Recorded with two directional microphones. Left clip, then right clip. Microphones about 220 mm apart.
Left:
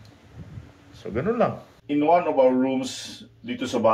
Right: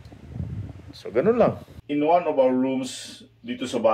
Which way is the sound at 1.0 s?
30° right (ahead or behind).